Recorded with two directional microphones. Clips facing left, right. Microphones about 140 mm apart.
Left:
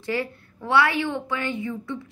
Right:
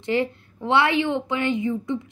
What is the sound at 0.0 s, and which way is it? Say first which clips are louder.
A woman's voice: right 4 dB; 20° right (ahead or behind).